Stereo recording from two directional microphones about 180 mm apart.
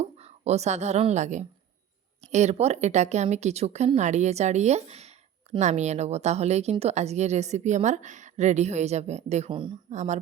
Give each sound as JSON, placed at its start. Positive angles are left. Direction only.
{"t": 0.0, "sound": "a woman's voice", "side_deg": -35}
{"t": 9.9, "sound": "speech", "side_deg": -40}